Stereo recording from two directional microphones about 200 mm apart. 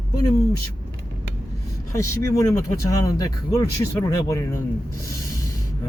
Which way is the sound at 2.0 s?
15° left (ahead or behind).